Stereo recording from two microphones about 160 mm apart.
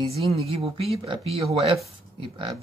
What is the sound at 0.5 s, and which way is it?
Speech, 35° right (ahead or behind).